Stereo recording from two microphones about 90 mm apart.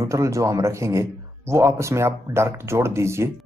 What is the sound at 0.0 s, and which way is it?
Speech, 35° right (ahead or behind).